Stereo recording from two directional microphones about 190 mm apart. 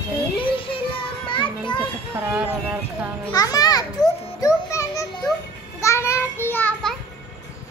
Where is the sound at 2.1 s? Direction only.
5° right (ahead or behind).